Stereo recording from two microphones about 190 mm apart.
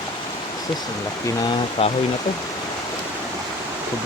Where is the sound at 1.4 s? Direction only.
25° left (ahead or behind).